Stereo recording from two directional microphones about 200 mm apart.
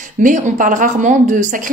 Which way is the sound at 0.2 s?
40° right (ahead or behind).